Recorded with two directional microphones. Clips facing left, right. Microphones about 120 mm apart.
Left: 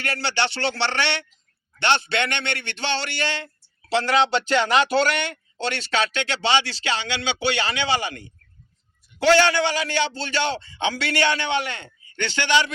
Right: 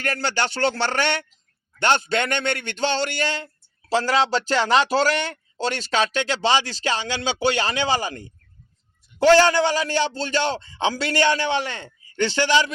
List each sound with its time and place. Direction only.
0.0 s speech: 45° right (ahead or behind)